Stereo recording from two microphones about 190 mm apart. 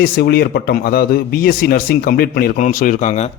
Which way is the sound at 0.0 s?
55° left (ahead or behind).